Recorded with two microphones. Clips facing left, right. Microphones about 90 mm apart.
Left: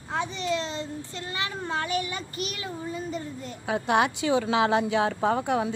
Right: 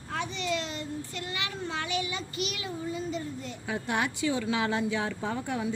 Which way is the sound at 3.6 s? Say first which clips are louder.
Left 7 dB; 70° left (ahead or behind).